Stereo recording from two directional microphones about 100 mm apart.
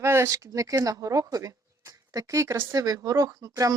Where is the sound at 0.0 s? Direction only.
25° right (ahead or behind).